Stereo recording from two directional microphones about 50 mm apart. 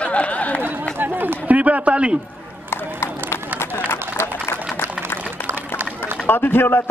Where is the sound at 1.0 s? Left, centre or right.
Right.